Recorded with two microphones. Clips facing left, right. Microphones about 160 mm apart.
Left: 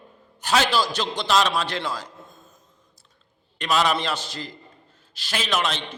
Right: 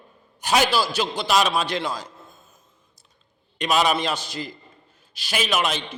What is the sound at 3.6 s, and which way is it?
A man's voice, 15° right (ahead or behind).